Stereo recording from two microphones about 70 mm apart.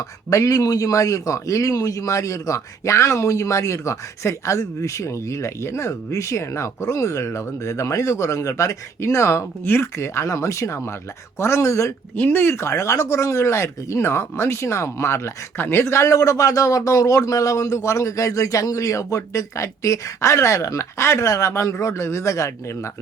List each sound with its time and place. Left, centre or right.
0.3 s a man's voice: left
12.1 s speech: left
15.5 s a man's voice: left